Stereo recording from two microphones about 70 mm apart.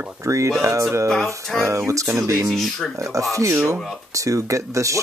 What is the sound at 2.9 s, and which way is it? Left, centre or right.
Speech, right.